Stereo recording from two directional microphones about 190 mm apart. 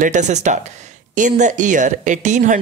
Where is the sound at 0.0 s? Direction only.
40° right (ahead or behind).